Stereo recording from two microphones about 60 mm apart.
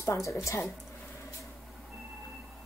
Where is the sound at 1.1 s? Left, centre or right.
Left.